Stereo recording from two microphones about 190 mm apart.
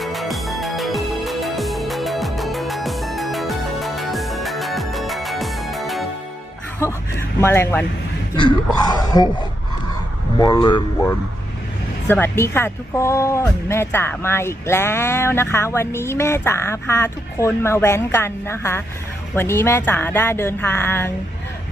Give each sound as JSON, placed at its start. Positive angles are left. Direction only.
{"t": 0.0, "sound": "music", "side_deg": 0}
{"t": 6.7, "sound": "a sound", "side_deg": 15}
{"t": 9.0, "sound": "speech", "side_deg": 20}
{"t": 10.3, "sound": "speech", "side_deg": 20}
{"t": 12.0, "sound": "speech", "side_deg": 10}